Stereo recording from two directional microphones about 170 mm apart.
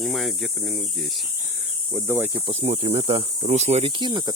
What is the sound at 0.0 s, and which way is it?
Speech, centre (ahead or behind).